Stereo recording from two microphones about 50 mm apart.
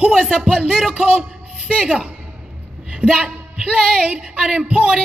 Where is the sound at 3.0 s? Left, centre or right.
Left.